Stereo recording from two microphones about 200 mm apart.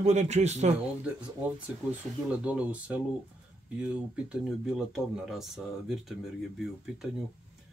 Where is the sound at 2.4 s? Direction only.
5° right (ahead or behind).